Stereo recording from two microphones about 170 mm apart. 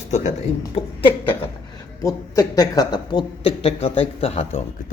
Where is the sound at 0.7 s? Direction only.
30° left (ahead or behind).